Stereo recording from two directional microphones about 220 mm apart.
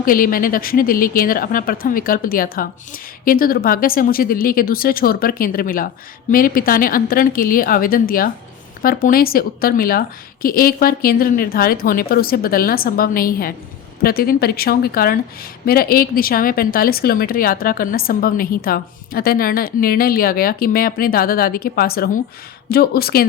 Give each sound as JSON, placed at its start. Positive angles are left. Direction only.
{"t": 0.0, "sound": "a woman's voice", "side_deg": 40}